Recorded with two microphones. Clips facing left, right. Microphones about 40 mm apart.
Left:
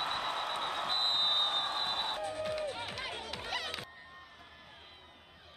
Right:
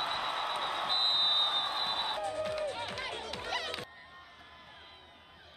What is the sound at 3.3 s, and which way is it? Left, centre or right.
Music, centre.